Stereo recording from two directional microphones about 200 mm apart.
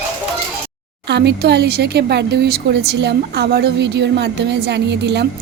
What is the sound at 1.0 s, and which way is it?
Speech, 60° right (ahead or behind).